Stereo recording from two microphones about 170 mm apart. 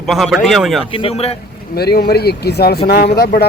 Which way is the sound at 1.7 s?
65° left (ahead or behind).